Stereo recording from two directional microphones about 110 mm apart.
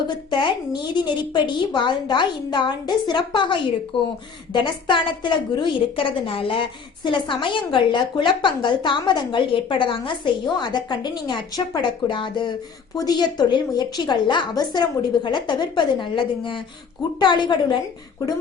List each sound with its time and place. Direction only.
0.3 s a woman's voice: 45° left (ahead or behind)